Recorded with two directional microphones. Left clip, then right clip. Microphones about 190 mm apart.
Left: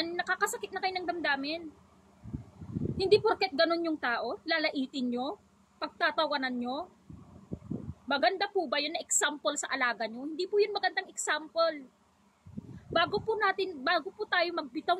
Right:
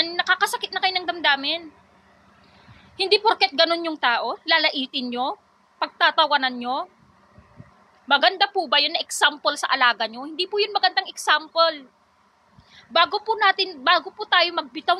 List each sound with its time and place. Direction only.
0.0 s a sound: 20° left (ahead or behind)
3.0 s a woman's voice: 15° left (ahead or behind)
8.1 s a woman's voice: 15° left (ahead or behind)
13.3 s a woman's voice: 15° left (ahead or behind)